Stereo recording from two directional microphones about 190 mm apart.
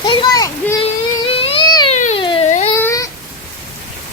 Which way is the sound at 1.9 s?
35° left (ahead or behind).